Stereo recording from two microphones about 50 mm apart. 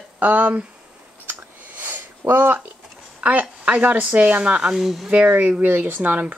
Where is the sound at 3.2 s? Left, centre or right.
Right.